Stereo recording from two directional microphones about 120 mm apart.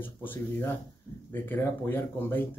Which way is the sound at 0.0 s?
15° left (ahead or behind).